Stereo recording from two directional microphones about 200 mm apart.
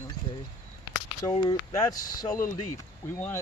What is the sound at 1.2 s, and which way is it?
Speech, 20° left (ahead or behind).